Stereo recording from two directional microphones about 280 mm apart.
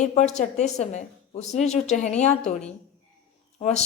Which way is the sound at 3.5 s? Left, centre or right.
Left.